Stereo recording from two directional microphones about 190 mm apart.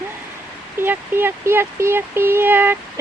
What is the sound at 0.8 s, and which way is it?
Speech, 10° right (ahead or behind).